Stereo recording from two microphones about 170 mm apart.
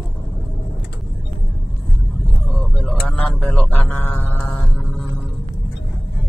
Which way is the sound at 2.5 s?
Centre (ahead or behind).